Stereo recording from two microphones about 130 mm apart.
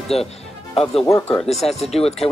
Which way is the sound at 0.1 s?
50° left (ahead or behind).